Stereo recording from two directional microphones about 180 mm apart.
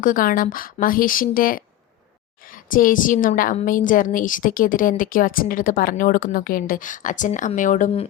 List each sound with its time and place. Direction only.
0.0 s a woman's voice: 50° left (ahead or behind)